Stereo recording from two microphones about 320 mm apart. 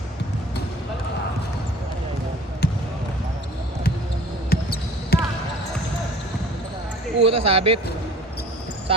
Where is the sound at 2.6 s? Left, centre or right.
Left.